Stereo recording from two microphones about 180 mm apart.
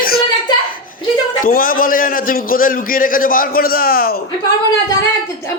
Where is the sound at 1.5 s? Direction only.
55° left (ahead or behind).